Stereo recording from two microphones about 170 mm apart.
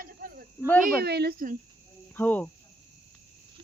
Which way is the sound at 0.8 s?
70° right (ahead or behind).